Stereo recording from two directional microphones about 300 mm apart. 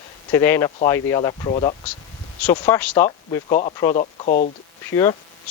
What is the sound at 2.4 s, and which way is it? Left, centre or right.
Speech, centre.